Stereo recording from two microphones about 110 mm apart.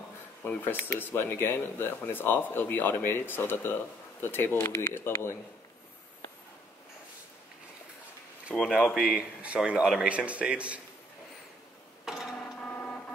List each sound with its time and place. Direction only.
0.4 s speech: 15° left (ahead or behind)
8.5 s speech: centre (ahead or behind)
12.0 s printer: 5° right (ahead or behind)
12.4 s printer: 10° left (ahead or behind)